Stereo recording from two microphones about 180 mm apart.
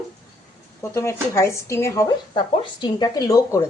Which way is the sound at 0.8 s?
15° left (ahead or behind).